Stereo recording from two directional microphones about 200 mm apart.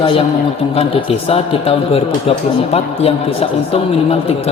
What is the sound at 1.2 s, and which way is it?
A man's voice, 30° left (ahead or behind).